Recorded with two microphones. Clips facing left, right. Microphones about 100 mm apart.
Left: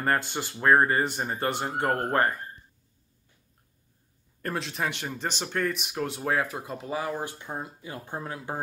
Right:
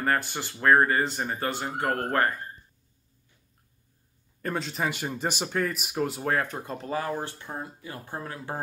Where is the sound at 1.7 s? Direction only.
30° left (ahead or behind).